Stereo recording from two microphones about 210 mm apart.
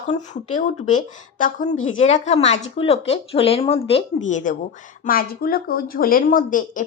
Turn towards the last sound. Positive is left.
turn(degrees=40)  # may be behind; listen again after turning